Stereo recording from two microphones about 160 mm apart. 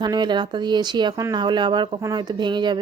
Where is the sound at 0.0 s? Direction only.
25° right (ahead or behind).